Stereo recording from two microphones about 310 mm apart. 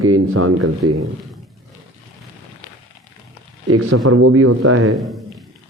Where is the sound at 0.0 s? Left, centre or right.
Right.